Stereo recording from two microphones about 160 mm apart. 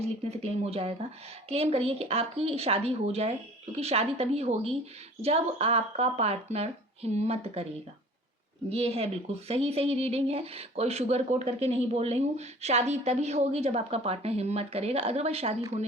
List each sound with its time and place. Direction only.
0.0 s speech: 40° right (ahead or behind)
8.7 s speech: 40° right (ahead or behind)